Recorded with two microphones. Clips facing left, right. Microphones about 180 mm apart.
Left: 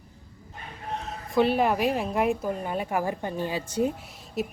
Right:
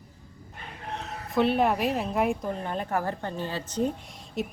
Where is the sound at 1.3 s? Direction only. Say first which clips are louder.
Left 1 dB; centre (ahead or behind).